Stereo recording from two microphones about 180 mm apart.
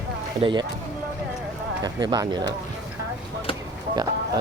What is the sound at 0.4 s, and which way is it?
Speech, 30° right (ahead or behind).